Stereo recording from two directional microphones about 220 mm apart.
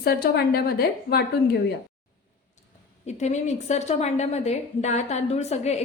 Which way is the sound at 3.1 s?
30° left (ahead or behind).